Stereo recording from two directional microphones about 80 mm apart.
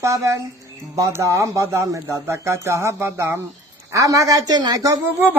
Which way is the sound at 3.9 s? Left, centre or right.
Right.